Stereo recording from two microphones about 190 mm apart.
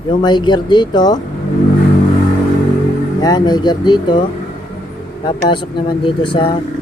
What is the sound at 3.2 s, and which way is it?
Speech, 20° left (ahead or behind).